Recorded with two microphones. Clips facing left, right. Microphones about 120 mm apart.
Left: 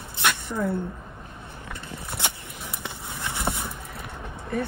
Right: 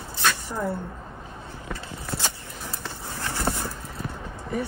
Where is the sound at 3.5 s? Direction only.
Centre (ahead or behind).